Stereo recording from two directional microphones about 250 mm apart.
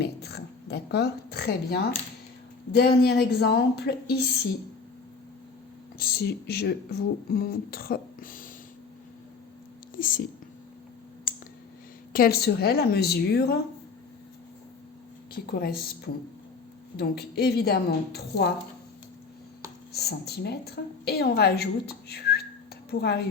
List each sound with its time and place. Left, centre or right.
0.0 s a sound: left
2.7 s a woman's voice: left
6.0 s a woman's voice: left
9.9 s whispering: left
12.1 s a woman's voice: left
15.3 s speech: left
17.0 s a woman's voice: left
19.9 s a woman's voice: left